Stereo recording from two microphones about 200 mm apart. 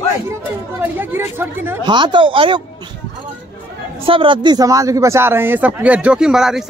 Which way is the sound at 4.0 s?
25° right (ahead or behind).